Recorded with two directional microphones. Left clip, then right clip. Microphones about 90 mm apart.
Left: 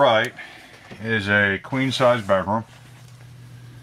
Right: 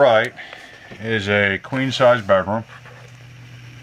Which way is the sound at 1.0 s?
20° right (ahead or behind).